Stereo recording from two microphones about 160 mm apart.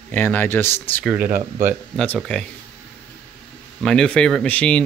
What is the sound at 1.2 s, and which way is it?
Speech, 55° right (ahead or behind).